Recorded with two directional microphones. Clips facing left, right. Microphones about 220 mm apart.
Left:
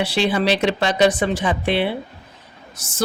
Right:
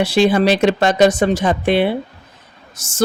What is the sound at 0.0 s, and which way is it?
Speech, 45° right (ahead or behind).